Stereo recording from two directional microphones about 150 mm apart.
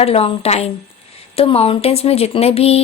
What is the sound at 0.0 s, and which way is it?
Speech, 40° left (ahead or behind).